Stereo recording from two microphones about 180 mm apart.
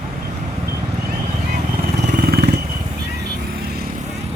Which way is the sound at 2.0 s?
60° right (ahead or behind).